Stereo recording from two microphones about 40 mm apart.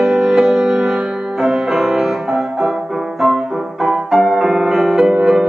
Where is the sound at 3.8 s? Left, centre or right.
Centre.